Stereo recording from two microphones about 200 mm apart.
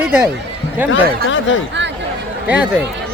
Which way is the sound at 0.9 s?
70° left (ahead or behind).